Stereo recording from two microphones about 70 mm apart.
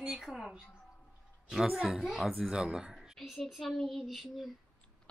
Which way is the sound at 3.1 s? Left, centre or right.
Centre.